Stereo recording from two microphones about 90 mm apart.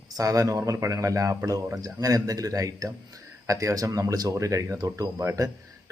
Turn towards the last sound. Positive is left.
turn(degrees=-35)  # may be behind; listen again after turning